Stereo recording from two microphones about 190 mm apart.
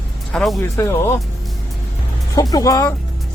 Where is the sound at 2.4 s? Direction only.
20° left (ahead or behind).